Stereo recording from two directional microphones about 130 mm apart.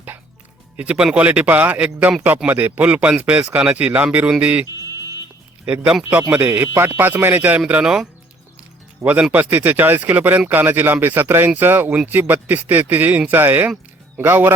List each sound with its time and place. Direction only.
0.8 s speech: 10° right (ahead or behind)
5.6 s speech: 10° right (ahead or behind)